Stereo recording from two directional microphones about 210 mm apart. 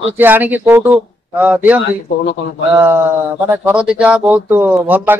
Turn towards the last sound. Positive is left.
turn(degrees=-10)  # may be behind; listen again after turning